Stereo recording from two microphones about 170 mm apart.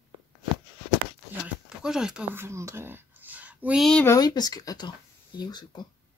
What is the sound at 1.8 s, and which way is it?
Speech, 5° right (ahead or behind).